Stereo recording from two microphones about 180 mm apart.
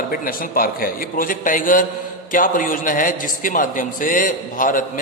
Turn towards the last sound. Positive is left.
turn(degrees=50)  # may be behind; listen again after turning